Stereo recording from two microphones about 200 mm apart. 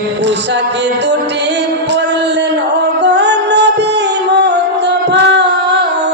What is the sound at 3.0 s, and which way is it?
Music, 60° right (ahead or behind).